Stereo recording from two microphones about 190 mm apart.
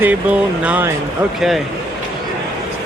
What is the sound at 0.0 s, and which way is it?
A man's voice, 5° right (ahead or behind).